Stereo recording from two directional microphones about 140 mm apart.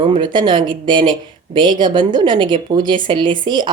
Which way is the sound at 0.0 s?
35° right (ahead or behind).